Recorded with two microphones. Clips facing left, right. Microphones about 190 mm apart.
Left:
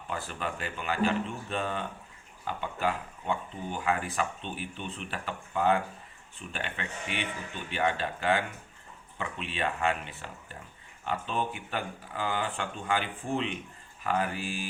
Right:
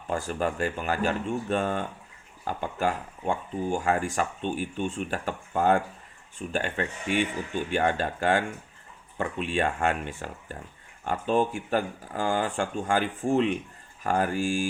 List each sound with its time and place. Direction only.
0.1 s speech: 45° right (ahead or behind)